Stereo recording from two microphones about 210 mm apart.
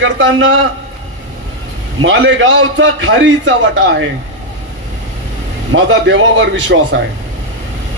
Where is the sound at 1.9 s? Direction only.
65° right (ahead or behind).